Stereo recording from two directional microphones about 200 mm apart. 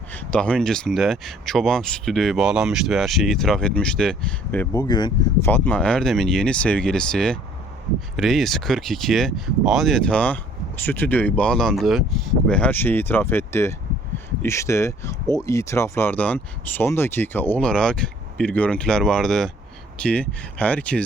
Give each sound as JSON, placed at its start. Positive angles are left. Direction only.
{"t": 0.1, "sound": "speech", "side_deg": 5}
{"t": 4.8, "sound": "speech", "side_deg": 20}
{"t": 5.5, "sound": "speech", "side_deg": 10}